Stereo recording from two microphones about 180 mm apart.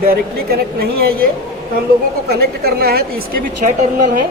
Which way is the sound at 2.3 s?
60° right (ahead or behind).